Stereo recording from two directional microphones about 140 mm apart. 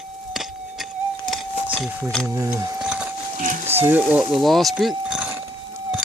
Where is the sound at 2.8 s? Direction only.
5° right (ahead or behind).